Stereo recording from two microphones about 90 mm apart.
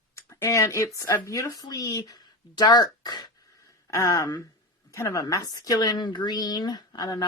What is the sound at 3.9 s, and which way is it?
Speech, 35° left (ahead or behind).